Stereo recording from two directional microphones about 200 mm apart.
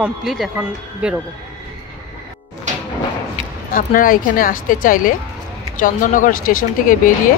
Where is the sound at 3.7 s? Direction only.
45° left (ahead or behind).